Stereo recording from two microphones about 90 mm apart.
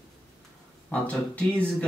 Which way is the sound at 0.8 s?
15° left (ahead or behind).